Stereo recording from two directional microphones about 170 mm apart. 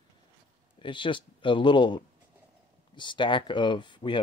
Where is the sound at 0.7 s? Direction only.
30° left (ahead or behind).